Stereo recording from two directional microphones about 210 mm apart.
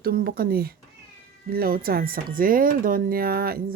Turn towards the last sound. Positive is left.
turn(degrees=-45)  # may be behind; listen again after turning